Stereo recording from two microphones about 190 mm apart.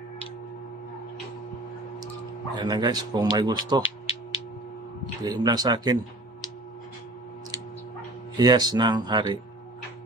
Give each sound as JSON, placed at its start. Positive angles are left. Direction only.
{"t": 2.5, "sound": "speech", "side_deg": -20}
{"t": 5.2, "sound": "speech", "side_deg": -20}
{"t": 8.4, "sound": "speech", "side_deg": -20}